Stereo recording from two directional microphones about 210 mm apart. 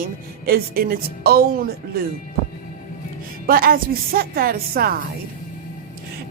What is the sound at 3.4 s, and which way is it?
Speech, 45° right (ahead or behind).